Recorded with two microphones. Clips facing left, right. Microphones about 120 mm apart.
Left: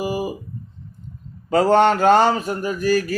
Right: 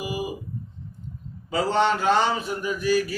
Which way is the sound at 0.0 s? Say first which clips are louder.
Left 6 dB; 45° left (ahead or behind).